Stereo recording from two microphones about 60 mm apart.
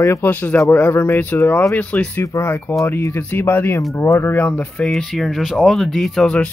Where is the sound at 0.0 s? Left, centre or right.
Left.